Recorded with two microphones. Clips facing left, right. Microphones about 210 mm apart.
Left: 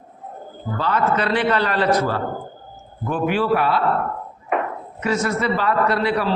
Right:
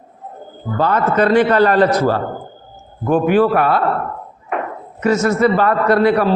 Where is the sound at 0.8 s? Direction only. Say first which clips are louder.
Right 6 dB; 45° right (ahead or behind).